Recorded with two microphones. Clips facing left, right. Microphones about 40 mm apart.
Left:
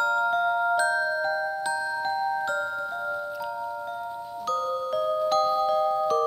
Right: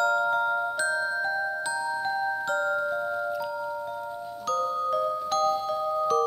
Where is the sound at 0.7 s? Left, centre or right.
Centre.